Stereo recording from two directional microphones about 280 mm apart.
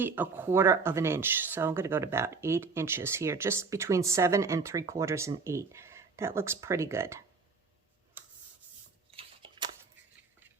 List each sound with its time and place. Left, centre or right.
0.0 s speech: centre
8.2 s rub: centre
9.1 s a sound: centre